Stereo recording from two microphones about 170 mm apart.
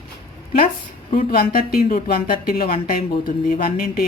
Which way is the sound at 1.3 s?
60° left (ahead or behind).